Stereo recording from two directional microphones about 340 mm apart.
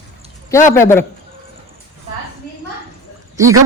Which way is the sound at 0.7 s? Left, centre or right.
Centre.